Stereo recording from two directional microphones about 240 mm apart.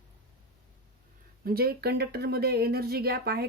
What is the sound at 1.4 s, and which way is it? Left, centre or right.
Speech, right.